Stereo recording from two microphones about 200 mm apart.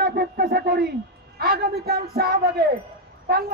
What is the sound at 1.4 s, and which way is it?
A man's voice, 50° right (ahead or behind).